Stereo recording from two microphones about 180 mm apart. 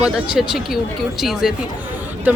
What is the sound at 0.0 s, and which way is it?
Speech, 5° right (ahead or behind).